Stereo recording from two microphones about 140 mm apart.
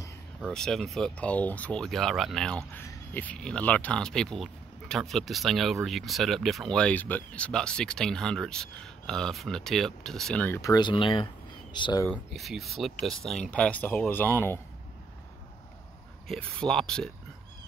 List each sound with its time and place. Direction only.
0.4 s speech: 5° left (ahead or behind)
10.6 s speech: 30° left (ahead or behind)
12.1 s speech: centre (ahead or behind); by 14.6 s 15° left (ahead or behind)
16.3 s speech: 5° left (ahead or behind)